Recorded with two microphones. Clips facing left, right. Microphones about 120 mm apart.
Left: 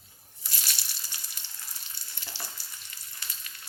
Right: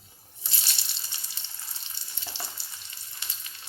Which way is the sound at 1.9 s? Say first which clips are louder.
Right 1 dB; 20° right (ahead or behind).